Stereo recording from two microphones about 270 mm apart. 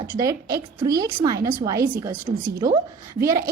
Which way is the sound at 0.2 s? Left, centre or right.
Centre.